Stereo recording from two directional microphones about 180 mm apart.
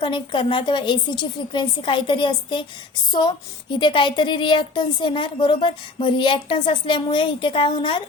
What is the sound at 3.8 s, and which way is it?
A woman's voice, 25° left (ahead or behind).